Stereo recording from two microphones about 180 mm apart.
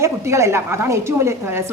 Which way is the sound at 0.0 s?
15° right (ahead or behind).